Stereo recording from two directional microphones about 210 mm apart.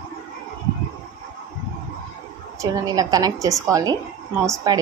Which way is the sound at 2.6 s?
15° right (ahead or behind).